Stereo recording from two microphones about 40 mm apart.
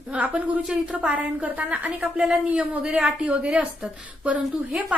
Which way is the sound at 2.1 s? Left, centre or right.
Right.